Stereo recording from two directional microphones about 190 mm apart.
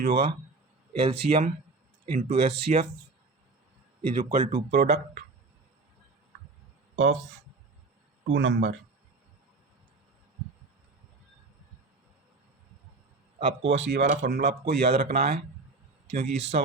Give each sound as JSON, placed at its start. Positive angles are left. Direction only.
{"t": 0.0, "sound": "speech", "side_deg": -55}
{"t": 0.9, "sound": "speech", "side_deg": -30}
{"t": 4.2, "sound": "speech", "side_deg": -45}
{"t": 4.7, "sound": "speech", "side_deg": -60}
{"t": 6.9, "sound": "speech", "side_deg": -80}
{"t": 8.3, "sound": "speech", "side_deg": -75}
{"t": 13.4, "sound": "speech", "side_deg": -70}
{"t": 14.1, "sound": "speech", "side_deg": -50}
{"t": 16.2, "sound": "speech", "side_deg": -35}